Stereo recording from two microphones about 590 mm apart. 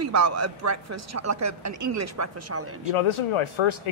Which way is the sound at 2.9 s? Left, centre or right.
Left.